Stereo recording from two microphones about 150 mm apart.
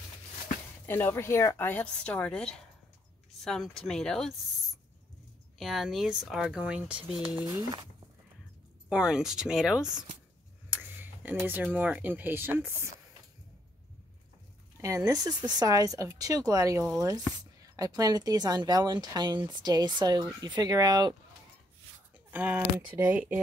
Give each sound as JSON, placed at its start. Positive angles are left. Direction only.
{"t": 0.8, "sound": "a woman's voice", "side_deg": 15}
{"t": 5.6, "sound": "speech", "side_deg": 0}
{"t": 7.4, "sound": "speech", "side_deg": -25}
{"t": 8.8, "sound": "speech", "side_deg": -5}
{"t": 14.8, "sound": "speech", "side_deg": -20}
{"t": 22.3, "sound": "speech", "side_deg": -10}